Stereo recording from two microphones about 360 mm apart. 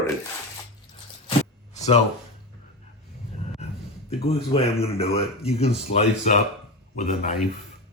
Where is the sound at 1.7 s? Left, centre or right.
Centre.